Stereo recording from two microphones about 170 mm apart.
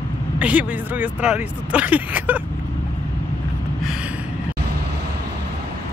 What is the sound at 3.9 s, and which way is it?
Gasp, 5° right (ahead or behind).